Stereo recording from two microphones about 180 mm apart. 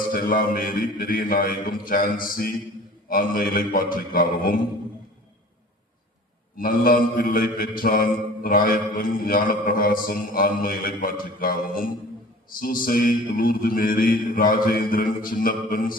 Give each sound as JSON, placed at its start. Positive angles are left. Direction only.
{"t": 0.1, "sound": "mantra", "side_deg": 50}
{"t": 6.6, "sound": "mantra", "side_deg": 50}